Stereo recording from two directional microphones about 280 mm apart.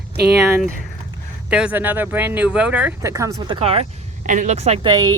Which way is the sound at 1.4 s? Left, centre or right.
Centre.